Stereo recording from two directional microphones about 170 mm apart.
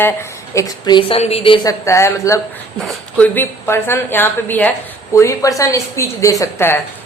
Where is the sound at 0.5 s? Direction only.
25° left (ahead or behind).